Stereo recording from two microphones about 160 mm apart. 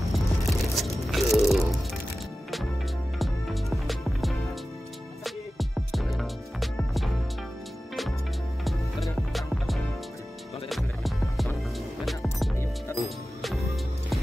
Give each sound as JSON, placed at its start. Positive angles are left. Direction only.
{"t": 0.1, "sound": "music", "side_deg": 0}
{"t": 3.2, "sound": "music", "side_deg": 0}
{"t": 8.6, "sound": "music", "side_deg": 0}